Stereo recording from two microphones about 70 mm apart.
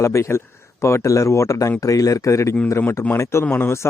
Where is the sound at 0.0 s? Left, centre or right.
Left.